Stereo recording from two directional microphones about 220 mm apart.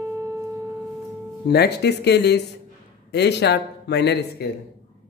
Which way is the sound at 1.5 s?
50° left (ahead or behind).